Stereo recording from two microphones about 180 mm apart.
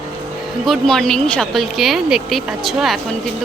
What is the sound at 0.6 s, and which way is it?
A woman's voice, centre (ahead or behind).